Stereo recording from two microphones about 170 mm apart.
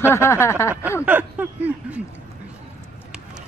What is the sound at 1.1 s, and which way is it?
Speech, 10° right (ahead or behind).